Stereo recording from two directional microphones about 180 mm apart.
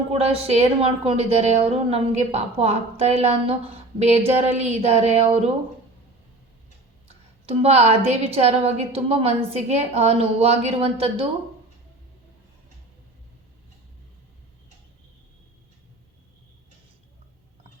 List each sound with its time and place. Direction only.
0.1 s a woman's voice: 35° right (ahead or behind)
7.4 s a woman's voice: 35° right (ahead or behind)